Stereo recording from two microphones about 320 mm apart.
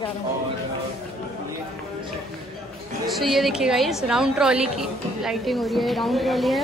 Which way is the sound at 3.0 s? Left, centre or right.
Centre.